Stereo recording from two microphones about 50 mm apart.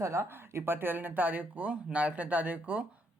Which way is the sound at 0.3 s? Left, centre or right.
Right.